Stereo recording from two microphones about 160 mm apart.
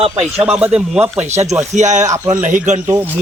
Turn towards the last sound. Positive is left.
turn(degrees=-15)  # may be behind; listen again after turning